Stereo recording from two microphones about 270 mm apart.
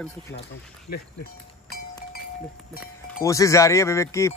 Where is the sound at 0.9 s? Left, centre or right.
Left.